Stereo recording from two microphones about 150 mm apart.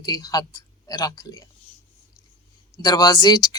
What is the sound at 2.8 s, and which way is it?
Speech, 25° left (ahead or behind).